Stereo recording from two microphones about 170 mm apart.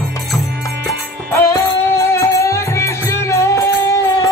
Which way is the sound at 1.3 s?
15° left (ahead or behind).